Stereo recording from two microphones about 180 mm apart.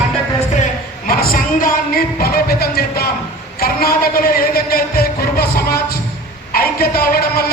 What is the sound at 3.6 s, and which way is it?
A man's voice, 55° left (ahead or behind).